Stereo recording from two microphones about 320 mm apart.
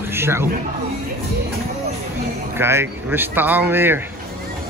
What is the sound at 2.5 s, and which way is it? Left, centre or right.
Speech, centre.